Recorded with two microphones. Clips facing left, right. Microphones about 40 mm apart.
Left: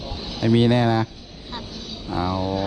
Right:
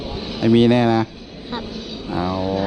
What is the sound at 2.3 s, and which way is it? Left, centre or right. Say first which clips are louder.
Speech: right 4 dB; centre.